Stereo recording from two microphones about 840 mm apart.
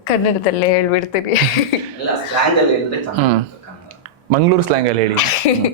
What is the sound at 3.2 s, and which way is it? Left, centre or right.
Speech, right.